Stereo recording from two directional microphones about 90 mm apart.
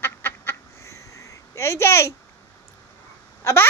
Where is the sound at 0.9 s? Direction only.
35° left (ahead or behind).